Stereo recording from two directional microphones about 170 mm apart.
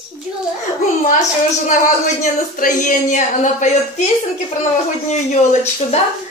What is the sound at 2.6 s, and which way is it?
A woman's voice, 50° left (ahead or behind).